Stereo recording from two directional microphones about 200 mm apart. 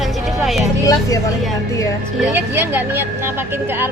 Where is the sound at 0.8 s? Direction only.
15° left (ahead or behind).